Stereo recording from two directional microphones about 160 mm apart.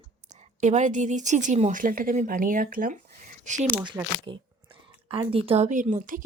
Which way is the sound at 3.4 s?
50° right (ahead or behind).